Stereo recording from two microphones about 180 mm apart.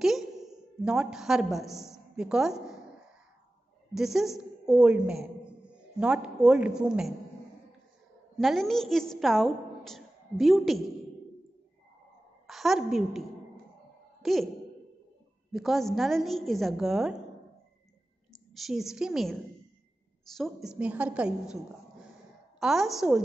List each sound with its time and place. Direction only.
0.8 s a woman's voice: 5° right (ahead or behind)
3.9 s a woman's voice: centre (ahead or behind)
8.4 s a woman's voice: centre (ahead or behind)
12.4 s a woman's voice: centre (ahead or behind)
14.2 s speech: centre (ahead or behind)
15.5 s a woman's voice: centre (ahead or behind)
18.5 s a woman's voice: centre (ahead or behind)
22.6 s a woman's voice: centre (ahead or behind)